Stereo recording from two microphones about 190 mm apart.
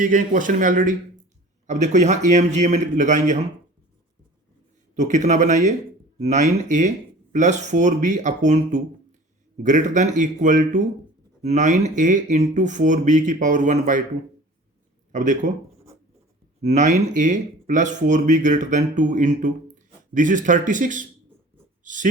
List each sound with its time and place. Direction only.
0.0 s speech: 45° right (ahead or behind)
4.9 s speech: 40° right (ahead or behind)
15.1 s speech: 40° right (ahead or behind)
16.6 s speech: 35° right (ahead or behind)